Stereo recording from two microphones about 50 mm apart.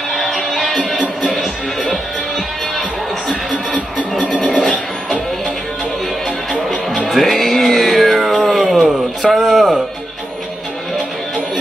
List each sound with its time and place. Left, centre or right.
0.1 s music: centre
4.1 s music: centre
4.4 s music: centre
7.1 s music: centre
8.5 s a sound: centre